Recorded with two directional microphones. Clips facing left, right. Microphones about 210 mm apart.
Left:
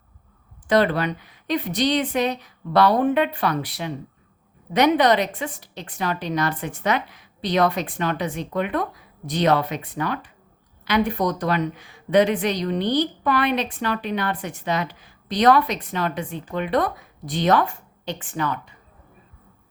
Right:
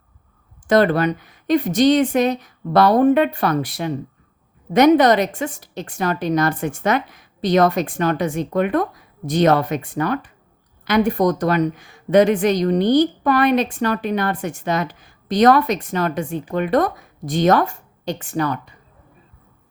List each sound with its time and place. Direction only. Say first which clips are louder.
0.7 s a woman's voice: right 4 dB; 45° right (ahead or behind)